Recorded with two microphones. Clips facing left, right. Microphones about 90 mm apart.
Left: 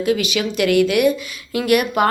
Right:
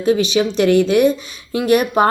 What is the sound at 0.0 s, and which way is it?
A woman's voice, 30° right (ahead or behind).